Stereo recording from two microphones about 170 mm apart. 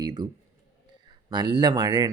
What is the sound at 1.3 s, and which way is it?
Speech, 25° right (ahead or behind).